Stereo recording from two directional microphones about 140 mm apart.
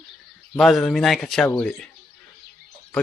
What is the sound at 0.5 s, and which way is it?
A man's voice, centre (ahead or behind).